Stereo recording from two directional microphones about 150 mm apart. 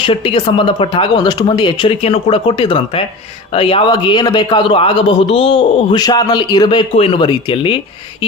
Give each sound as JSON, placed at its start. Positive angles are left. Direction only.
{"t": 0.0, "sound": "a man's voice", "side_deg": 35}
{"t": 6.9, "sound": "a man's voice", "side_deg": 40}